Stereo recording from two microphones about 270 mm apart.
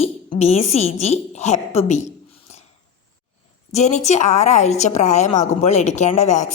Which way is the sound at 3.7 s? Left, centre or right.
Left.